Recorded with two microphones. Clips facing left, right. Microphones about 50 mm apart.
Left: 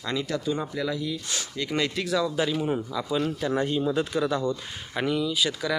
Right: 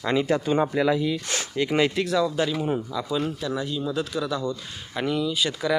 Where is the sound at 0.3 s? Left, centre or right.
Right.